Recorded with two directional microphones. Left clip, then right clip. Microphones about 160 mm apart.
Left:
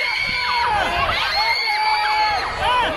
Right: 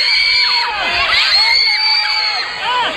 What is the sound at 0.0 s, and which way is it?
Children shouting, 55° left (ahead or behind).